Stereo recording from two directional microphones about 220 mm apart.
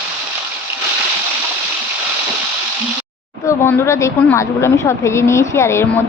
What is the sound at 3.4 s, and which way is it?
Speech, 10° left (ahead or behind).